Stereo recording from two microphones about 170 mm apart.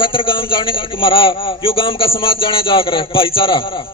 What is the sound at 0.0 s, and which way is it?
A man's voice, 30° left (ahead or behind).